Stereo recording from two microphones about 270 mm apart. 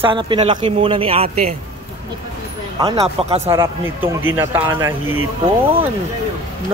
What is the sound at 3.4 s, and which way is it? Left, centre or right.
Speech, centre.